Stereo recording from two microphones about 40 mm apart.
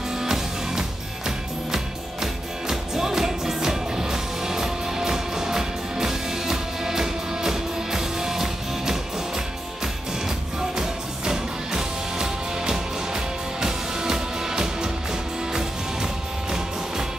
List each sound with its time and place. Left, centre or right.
0.1 s music: centre
10.8 s music: centre